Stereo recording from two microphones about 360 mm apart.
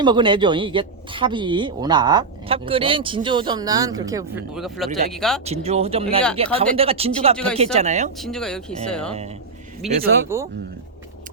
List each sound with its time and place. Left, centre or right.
0.0 s speech: centre
5.5 s speech: centre
7.3 s speech: centre
7.6 s speech: centre
8.2 s speech: centre